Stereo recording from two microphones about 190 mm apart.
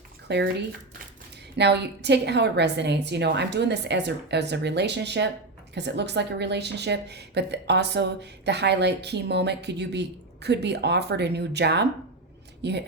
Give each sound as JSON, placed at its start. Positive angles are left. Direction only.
{"t": 0.3, "sound": "speech", "side_deg": -60}
{"t": 1.5, "sound": "speech", "side_deg": -65}